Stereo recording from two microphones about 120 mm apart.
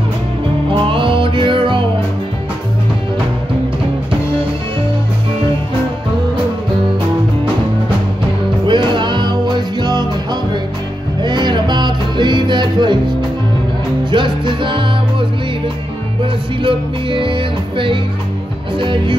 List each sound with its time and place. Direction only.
0.7 s music: 45° right (ahead or behind)
8.6 s music: 40° right (ahead or behind)
14.1 s music: 40° right (ahead or behind)
16.6 s music: 45° right (ahead or behind)